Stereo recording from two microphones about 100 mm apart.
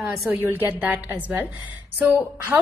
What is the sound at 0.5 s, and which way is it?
Speech, 20° right (ahead or behind).